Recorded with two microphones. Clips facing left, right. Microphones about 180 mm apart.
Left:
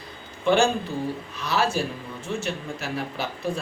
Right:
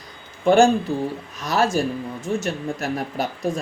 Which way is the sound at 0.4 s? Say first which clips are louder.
Right 5 dB; 40° right (ahead or behind).